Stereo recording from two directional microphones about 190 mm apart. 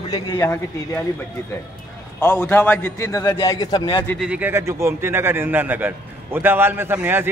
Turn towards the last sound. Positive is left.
turn(degrees=-10)  # may be behind; listen again after turning